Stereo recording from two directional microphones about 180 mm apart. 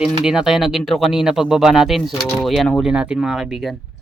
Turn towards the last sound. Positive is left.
turn(degrees=0)  # may be behind; listen again after turning